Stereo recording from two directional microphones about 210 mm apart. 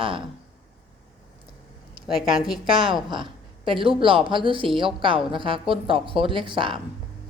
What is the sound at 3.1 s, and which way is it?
A woman's voice, 25° right (ahead or behind).